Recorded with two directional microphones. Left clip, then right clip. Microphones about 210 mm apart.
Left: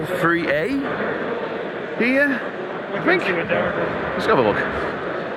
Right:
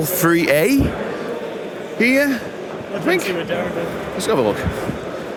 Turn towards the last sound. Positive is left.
turn(degrees=-35)  # may be behind; listen again after turning